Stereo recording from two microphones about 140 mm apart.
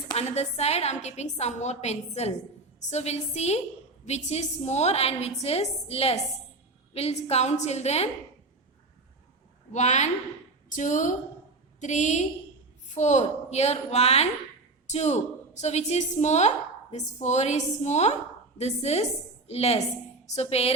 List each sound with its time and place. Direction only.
0.2 s a woman's voice: 50° left (ahead or behind)
9.7 s a woman's voice: 55° left (ahead or behind)